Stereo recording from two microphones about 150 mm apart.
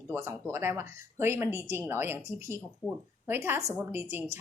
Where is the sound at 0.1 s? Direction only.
20° right (ahead or behind).